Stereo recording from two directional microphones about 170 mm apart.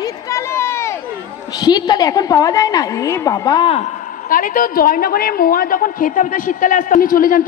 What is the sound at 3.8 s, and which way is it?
A woman's voice, 55° left (ahead or behind).